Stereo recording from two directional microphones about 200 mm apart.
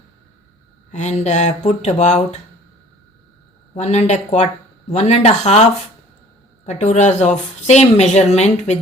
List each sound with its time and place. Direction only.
0.9 s speech: 35° left (ahead or behind)
3.8 s speech: 35° left (ahead or behind)
6.7 s speech: 35° left (ahead or behind)